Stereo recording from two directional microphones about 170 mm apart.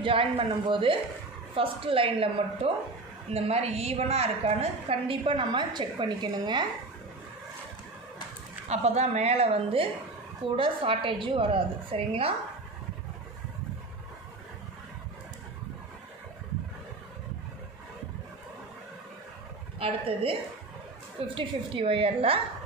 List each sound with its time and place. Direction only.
0.0 s a woman's voice: 30° right (ahead or behind)
8.6 s a woman's voice: 40° right (ahead or behind)
19.8 s a woman's voice: 35° right (ahead or behind)
21.4 s a woman's voice: 30° right (ahead or behind)